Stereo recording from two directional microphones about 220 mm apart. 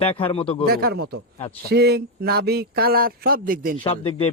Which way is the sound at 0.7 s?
45° right (ahead or behind).